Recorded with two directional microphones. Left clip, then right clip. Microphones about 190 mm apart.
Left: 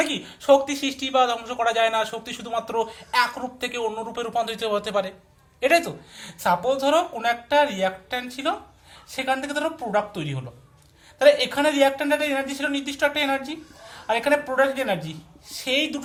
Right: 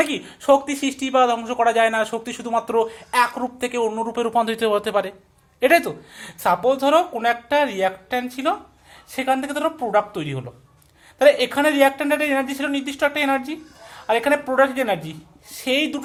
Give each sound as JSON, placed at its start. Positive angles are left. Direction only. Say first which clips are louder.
{"t": 0.0, "sound": "speech", "louder": "right 3 dB", "side_deg": -40}